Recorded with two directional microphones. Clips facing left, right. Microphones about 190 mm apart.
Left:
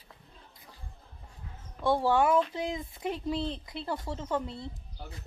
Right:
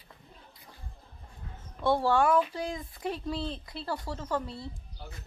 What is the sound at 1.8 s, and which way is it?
Speech, 15° left (ahead or behind).